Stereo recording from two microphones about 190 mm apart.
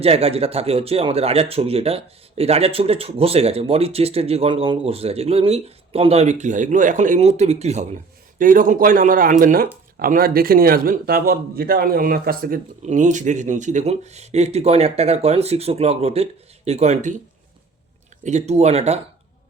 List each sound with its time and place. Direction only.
0.0 s speech: 30° right (ahead or behind)
8.4 s a man's voice: 45° right (ahead or behind)
12.8 s speech: 40° right (ahead or behind)
18.2 s speech: 35° right (ahead or behind)